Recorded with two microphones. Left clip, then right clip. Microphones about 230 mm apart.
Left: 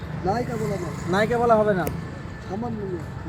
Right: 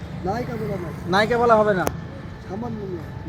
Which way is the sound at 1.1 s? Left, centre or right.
Centre.